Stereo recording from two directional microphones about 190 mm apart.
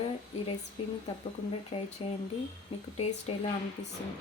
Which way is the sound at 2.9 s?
35° left (ahead or behind).